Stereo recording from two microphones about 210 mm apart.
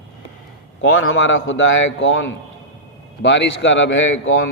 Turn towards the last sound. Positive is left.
turn(degrees=65)  # may be behind; listen again after turning